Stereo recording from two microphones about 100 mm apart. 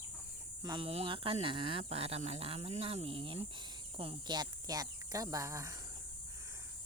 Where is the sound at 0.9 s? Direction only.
70° right (ahead or behind).